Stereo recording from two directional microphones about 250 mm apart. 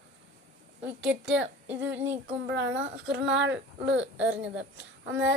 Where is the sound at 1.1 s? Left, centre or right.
Right.